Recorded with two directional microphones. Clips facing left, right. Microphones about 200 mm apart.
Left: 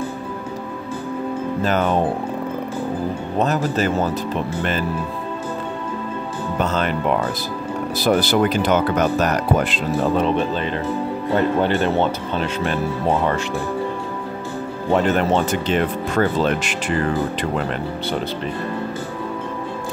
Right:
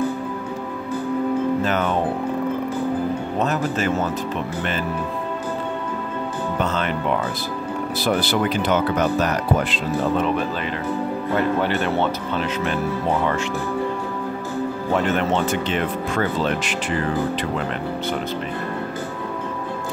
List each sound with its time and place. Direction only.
1.6 s speech: 35° left (ahead or behind)
3.3 s speech: 35° left (ahead or behind)
6.6 s speech: 40° left (ahead or behind)
8.0 s speech: 40° left (ahead or behind)
11.3 s speech: 30° left (ahead or behind)
15.0 s speech: 40° left (ahead or behind)